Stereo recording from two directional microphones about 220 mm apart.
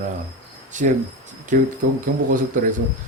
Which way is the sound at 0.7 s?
35° right (ahead or behind).